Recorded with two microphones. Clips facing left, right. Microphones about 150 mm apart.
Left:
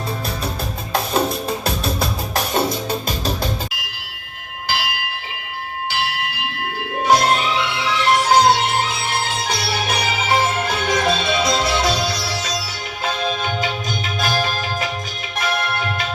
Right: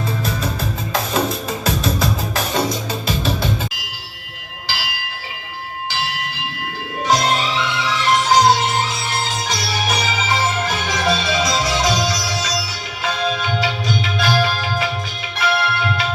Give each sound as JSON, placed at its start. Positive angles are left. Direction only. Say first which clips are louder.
{"t": 2.5, "sound": "music", "louder": "left 2 dB", "side_deg": 50}
{"t": 4.7, "sound": "bell", "louder": "left 4 dB", "side_deg": 55}
{"t": 7.0, "sound": "music", "louder": "left 2 dB", "side_deg": 55}